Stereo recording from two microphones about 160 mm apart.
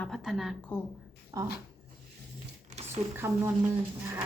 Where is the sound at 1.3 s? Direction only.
20° right (ahead or behind).